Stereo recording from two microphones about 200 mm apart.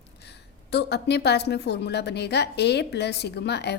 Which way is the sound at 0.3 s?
55° left (ahead or behind).